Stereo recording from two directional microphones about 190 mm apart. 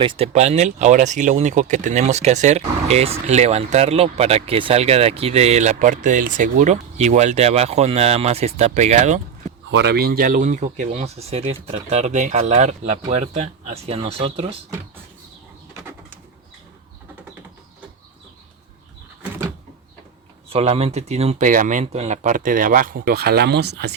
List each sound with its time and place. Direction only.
0.0 s speech: 30° right (ahead or behind)
9.6 s speech: 65° right (ahead or behind); by 14.6 s 30° right (ahead or behind)
19.2 s door: 10° right (ahead or behind)
20.5 s speech: 30° right (ahead or behind); by 23.9 s 60° right (ahead or behind)